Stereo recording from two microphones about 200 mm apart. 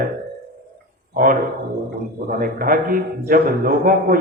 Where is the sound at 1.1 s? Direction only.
45° right (ahead or behind).